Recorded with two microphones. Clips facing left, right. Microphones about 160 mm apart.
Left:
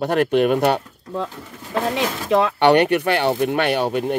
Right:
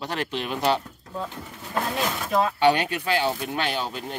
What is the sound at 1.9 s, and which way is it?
Speech, 90° left.